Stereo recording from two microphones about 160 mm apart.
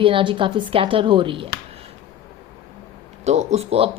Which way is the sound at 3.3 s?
45° right (ahead or behind).